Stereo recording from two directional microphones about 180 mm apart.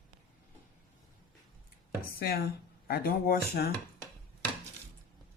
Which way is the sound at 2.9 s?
55° left (ahead or behind).